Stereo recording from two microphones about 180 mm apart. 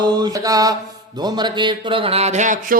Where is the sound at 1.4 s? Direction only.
25° right (ahead or behind); by 2.8 s 45° right (ahead or behind).